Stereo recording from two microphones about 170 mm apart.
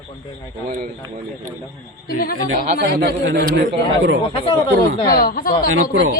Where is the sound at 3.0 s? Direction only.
75° right (ahead or behind).